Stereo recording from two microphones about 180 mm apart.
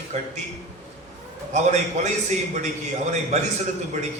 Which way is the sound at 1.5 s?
40° right (ahead or behind).